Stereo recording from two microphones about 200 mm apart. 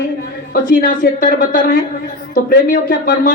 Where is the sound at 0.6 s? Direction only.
45° left (ahead or behind).